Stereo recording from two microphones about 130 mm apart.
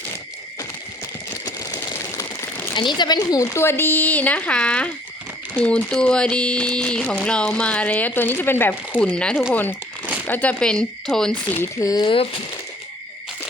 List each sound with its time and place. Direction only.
1.5 s crumpling: 30° left (ahead or behind)
2.7 s speech: 35° left (ahead or behind); by 11.3 s 5° left (ahead or behind)
11.6 s speech: 25° left (ahead or behind)
12.0 s speech: 45° left (ahead or behind)